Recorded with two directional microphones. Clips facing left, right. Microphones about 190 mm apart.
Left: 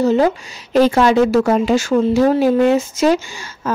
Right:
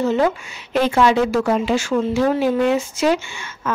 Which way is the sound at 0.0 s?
35° left (ahead or behind).